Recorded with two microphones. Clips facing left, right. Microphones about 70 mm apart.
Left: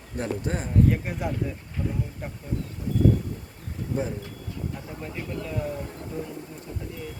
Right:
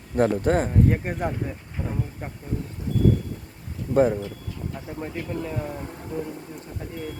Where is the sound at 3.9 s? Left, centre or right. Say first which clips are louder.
Right 10 dB; right.